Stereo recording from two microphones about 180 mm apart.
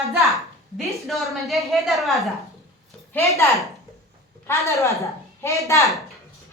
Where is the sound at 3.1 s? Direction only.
15° left (ahead or behind).